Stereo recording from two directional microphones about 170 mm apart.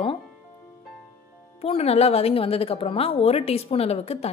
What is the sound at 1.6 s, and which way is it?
Speech, 35° left (ahead or behind).